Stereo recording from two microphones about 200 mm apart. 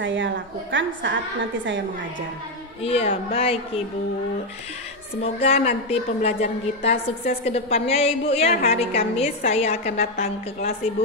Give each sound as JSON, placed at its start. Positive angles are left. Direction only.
{"t": 0.0, "sound": "a woman's voice", "side_deg": -65}
{"t": 2.8, "sound": "a woman's voice", "side_deg": 30}
{"t": 5.2, "sound": "a woman's voice", "side_deg": 30}